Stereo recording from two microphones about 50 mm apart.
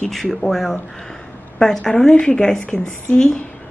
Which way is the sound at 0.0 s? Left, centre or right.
Centre.